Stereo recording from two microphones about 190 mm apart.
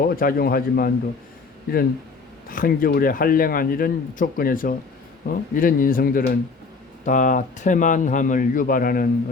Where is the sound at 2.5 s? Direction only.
50° left (ahead or behind).